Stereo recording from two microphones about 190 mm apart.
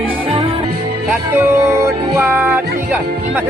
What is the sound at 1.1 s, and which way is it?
Music, 10° right (ahead or behind).